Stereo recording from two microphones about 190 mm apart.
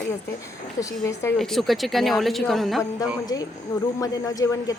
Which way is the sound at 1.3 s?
Centre (ahead or behind).